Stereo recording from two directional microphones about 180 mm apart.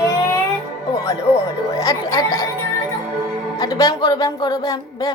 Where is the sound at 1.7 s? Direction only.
20° left (ahead or behind).